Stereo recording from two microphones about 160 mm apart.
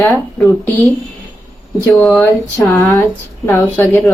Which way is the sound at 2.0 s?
10° left (ahead or behind).